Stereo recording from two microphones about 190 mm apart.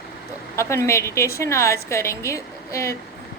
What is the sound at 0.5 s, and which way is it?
A woman's voice, 15° left (ahead or behind).